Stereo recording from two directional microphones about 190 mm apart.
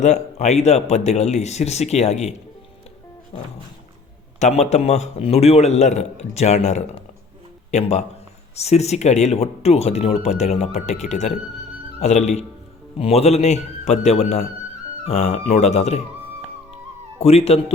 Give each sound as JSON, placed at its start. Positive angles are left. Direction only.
{"t": 0.0, "sound": "speech", "side_deg": 35}
{"t": 4.4, "sound": "speech", "side_deg": 35}
{"t": 17.2, "sound": "speech", "side_deg": 35}